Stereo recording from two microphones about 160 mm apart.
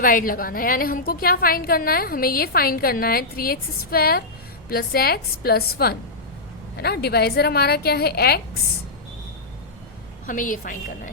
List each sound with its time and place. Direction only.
0.0 s a woman's voice: 60° left (ahead or behind); by 8.4 s 75° left (ahead or behind)
10.2 s a woman's voice: 55° left (ahead or behind)